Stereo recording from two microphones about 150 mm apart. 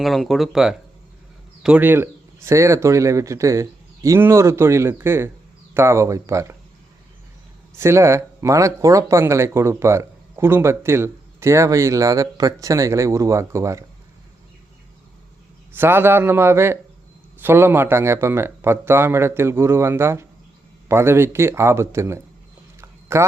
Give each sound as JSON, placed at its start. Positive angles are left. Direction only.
{"t": 0.0, "sound": "speech", "side_deg": 0}
{"t": 7.8, "sound": "speech", "side_deg": -20}
{"t": 15.7, "sound": "a man's voice", "side_deg": -15}
{"t": 22.8, "sound": "a sound", "side_deg": -15}